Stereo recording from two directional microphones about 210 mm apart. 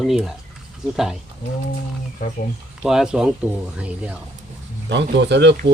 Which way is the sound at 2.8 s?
5° right (ahead or behind).